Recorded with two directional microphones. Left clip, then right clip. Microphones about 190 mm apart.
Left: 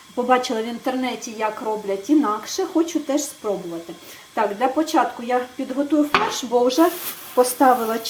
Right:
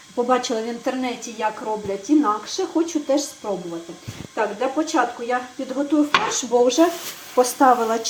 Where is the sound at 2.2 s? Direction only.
20° left (ahead or behind).